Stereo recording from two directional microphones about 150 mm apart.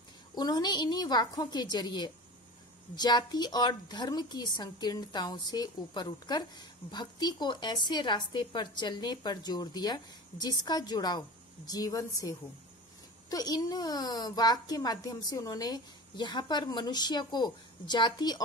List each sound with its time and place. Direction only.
0.3 s a child's voice: 25° left (ahead or behind)